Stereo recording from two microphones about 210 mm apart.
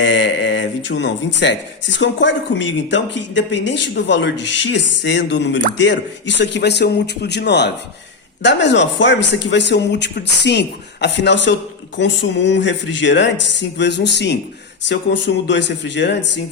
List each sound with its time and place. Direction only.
0.0 s a man's voice: 60° left (ahead or behind)